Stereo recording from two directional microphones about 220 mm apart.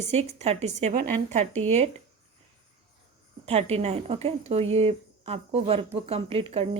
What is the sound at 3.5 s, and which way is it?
A woman's voice, 30° right (ahead or behind).